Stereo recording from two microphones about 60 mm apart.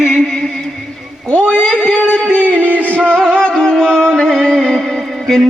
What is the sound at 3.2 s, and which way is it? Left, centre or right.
Music, centre.